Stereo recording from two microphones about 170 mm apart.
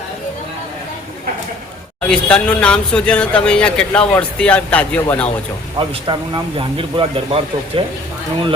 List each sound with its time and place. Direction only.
2.0 s speech: 5° left (ahead or behind)
5.9 s speech: 30° right (ahead or behind)